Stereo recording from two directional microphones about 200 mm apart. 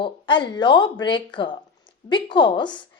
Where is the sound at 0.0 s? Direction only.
25° left (ahead or behind).